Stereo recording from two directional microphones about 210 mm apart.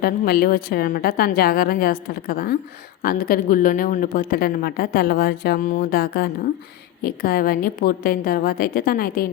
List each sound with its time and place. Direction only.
0.0 s a woman's voice: 45° left (ahead or behind)